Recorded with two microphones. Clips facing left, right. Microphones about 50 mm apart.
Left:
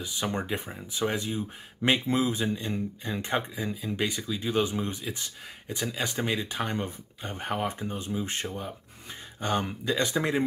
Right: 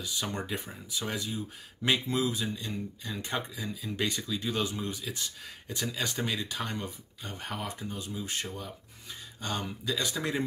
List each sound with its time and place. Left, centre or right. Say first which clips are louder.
0.0 s speech: left 4 dB; left
4.0 s speech: left 1 dB; centre
4.5 s speech: left 6 dB; left